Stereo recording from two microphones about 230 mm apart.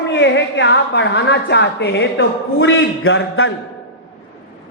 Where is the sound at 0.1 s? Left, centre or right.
Left.